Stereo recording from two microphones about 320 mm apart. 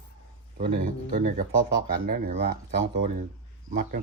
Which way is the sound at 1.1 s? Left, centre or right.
Right.